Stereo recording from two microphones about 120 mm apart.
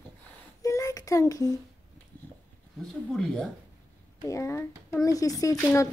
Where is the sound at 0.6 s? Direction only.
30° left (ahead or behind).